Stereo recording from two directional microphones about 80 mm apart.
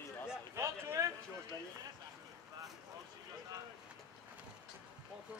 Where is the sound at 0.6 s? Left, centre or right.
Right.